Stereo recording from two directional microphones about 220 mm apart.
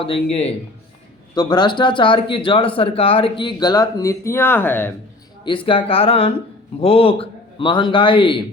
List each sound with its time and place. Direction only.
0.0 s speech: 25° left (ahead or behind); by 4.9 s 10° left (ahead or behind)
5.6 s speech: 25° left (ahead or behind)